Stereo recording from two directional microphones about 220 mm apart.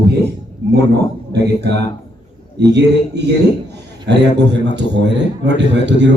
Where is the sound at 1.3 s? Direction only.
50° right (ahead or behind).